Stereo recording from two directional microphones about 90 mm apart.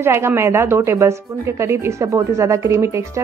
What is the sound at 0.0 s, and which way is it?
Speech, 30° right (ahead or behind).